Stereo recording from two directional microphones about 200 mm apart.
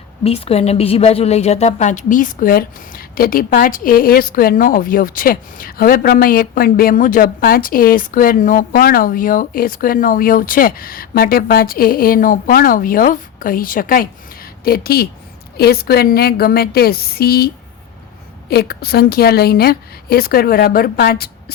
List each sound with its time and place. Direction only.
0.3 s a woman's voice: 30° left (ahead or behind); by 21.5 s 50° left (ahead or behind)